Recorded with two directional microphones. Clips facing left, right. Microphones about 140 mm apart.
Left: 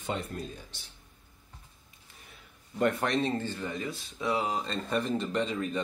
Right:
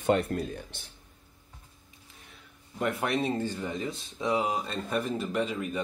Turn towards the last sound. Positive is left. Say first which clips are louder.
# even
turn(degrees=-10)  # may be behind; listen again after turning